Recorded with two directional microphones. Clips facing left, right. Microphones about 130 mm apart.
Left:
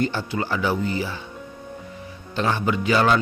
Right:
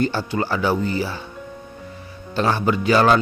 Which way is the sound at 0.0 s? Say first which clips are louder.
Right 3 dB; 35° right (ahead or behind).